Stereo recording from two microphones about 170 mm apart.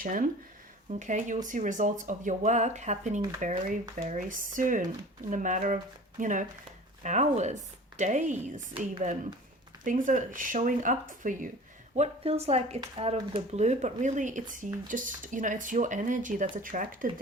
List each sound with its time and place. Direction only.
0.0 s speech: 55° right (ahead or behind)
9.8 s speech: 50° right (ahead or behind)
11.9 s a woman's voice: 35° right (ahead or behind); by 17.1 s 55° right (ahead or behind)